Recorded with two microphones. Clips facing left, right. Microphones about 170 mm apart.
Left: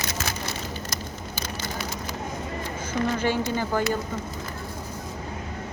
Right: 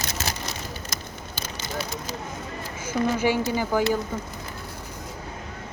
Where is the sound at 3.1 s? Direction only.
10° right (ahead or behind).